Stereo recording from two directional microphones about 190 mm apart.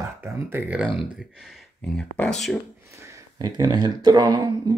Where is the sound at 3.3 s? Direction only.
20° right (ahead or behind).